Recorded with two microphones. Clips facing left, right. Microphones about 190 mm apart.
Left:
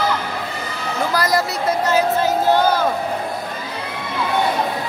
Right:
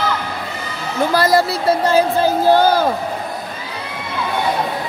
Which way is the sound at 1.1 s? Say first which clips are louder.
Right 5 dB; 30° right (ahead or behind).